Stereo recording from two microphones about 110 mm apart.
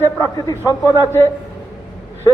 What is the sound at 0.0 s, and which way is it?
Speech, 30° left (ahead or behind).